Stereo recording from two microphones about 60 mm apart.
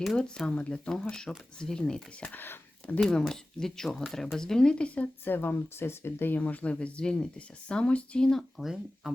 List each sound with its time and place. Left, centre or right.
0.0 s speech: centre
0.3 s speech: centre
2.2 s speech: left
3.0 s speech: centre
5.2 s speech: left
6.4 s speech: left
8.3 s speech: centre
8.6 s speech: centre